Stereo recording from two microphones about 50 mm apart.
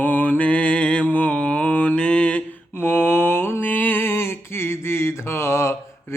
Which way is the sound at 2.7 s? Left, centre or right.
Left.